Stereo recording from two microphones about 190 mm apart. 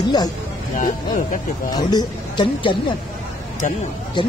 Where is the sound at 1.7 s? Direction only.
20° left (ahead or behind).